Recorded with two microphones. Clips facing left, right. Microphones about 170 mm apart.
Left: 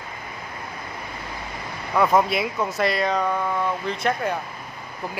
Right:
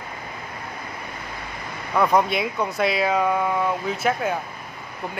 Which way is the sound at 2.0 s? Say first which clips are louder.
Even; centre (ahead or behind).